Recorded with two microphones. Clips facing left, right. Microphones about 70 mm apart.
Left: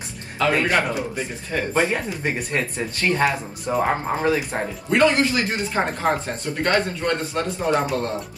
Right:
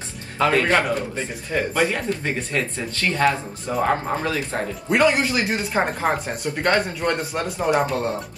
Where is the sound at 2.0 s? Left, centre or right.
Centre.